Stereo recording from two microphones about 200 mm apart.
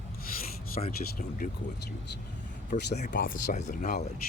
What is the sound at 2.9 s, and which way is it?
Speech, 40° left (ahead or behind).